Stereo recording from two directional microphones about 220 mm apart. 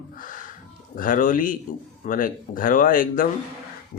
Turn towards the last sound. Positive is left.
turn(degrees=40)  # may be behind; listen again after turning